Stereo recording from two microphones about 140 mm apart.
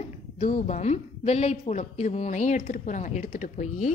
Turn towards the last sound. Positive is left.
turn(degrees=60)  # may be behind; listen again after turning